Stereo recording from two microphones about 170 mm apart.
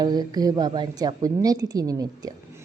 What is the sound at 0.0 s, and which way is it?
A woman's voice, 25° right (ahead or behind).